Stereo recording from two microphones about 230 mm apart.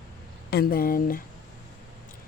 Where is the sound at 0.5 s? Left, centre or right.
Left.